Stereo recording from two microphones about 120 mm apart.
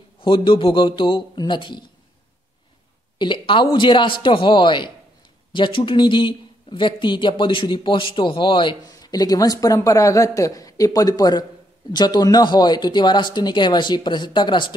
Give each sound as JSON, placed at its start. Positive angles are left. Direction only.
{"t": 0.2, "sound": "a man's voice", "side_deg": 45}
{"t": 3.2, "sound": "a man's voice", "side_deg": 40}